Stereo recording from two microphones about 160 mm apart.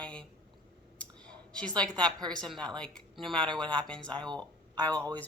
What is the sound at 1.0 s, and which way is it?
Clicking, 5° left (ahead or behind).